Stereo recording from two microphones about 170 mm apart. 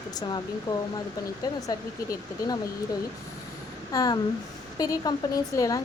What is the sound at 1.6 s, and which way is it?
Speech, 20° left (ahead or behind).